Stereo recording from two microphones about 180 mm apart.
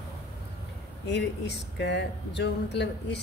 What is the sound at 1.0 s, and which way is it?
Speech, 70° left (ahead or behind).